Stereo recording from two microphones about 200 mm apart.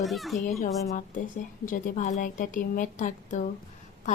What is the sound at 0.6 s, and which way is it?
A woman's voice, 40° left (ahead or behind).